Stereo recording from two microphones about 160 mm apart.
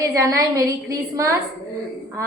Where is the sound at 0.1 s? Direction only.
20° right (ahead or behind).